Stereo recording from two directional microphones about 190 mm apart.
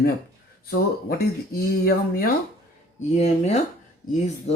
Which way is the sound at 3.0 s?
35° left (ahead or behind).